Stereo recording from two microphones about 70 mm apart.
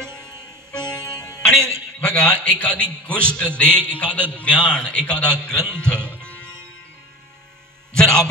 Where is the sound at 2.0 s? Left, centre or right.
Centre.